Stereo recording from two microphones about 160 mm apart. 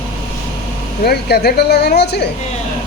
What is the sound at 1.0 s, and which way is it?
Speech, 85° left.